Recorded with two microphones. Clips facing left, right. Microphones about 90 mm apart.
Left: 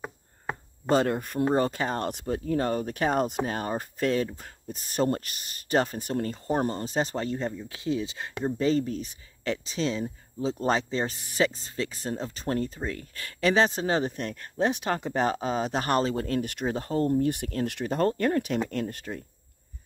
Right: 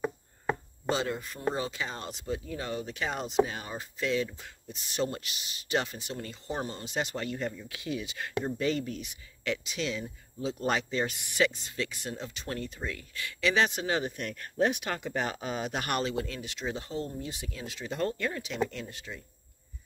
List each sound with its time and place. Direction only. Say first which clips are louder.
0.8 s speech: left 7 dB; 50° left (ahead or behind)
17.9 s speech: left 7 dB; 45° left (ahead or behind)